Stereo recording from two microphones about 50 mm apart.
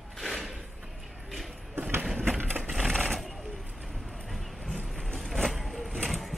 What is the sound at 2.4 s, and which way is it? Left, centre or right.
Typewriter, right.